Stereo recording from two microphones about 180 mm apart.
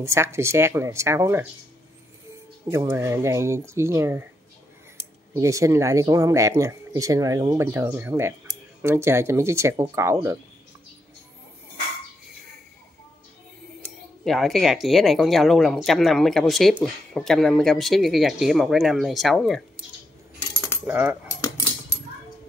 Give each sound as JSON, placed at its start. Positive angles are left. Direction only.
{"t": 0.0, "sound": "speech", "side_deg": -15}
{"t": 2.7, "sound": "speech", "side_deg": -15}
{"t": 5.3, "sound": "speech", "side_deg": -15}
{"t": 14.2, "sound": "speech", "side_deg": 0}
{"t": 20.8, "sound": "speech", "side_deg": -10}